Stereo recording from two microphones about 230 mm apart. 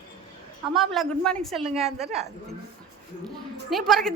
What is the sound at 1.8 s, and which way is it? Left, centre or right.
Speech, right.